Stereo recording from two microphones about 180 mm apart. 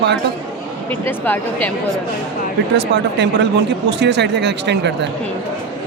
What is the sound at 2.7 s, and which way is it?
Speech, 75° right (ahead or behind).